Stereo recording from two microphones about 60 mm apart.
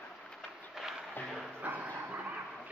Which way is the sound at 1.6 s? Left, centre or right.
Right.